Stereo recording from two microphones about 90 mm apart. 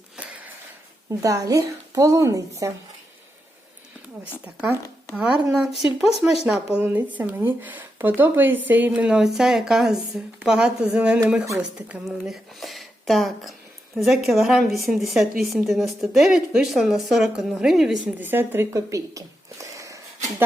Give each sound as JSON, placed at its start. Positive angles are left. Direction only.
{"t": 0.2, "sound": "a sound", "side_deg": -15}
{"t": 1.2, "sound": "a woman's voice", "side_deg": -40}
{"t": 4.4, "sound": "speech", "side_deg": -20}
{"t": 5.1, "sound": "speech", "side_deg": -10}
{"t": 18.2, "sound": "speech", "side_deg": -25}